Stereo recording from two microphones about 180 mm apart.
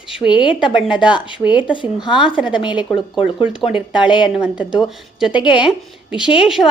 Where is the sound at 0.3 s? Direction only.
25° left (ahead or behind).